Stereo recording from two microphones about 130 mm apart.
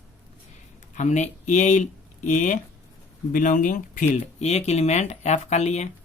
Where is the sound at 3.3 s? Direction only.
90° left.